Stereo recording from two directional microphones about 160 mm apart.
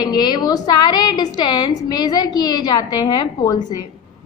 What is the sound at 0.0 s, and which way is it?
A woman's voice, 25° left (ahead or behind).